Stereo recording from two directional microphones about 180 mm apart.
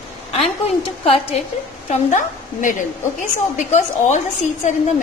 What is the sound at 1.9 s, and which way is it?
Speech, 45° left (ahead or behind).